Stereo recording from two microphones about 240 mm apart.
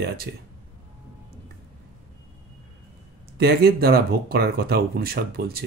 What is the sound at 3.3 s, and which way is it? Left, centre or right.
Speech, right.